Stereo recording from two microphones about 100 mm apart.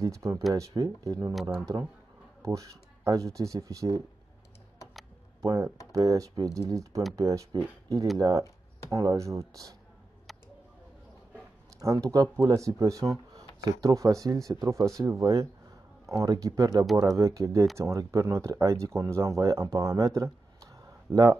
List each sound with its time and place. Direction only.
0.0 s speech: 30° right (ahead or behind)
1.3 s speech: 5° right (ahead or behind)
2.4 s speech: 30° right (ahead or behind)
5.4 s speech: 35° right (ahead or behind)
11.8 s speech: 35° right (ahead or behind)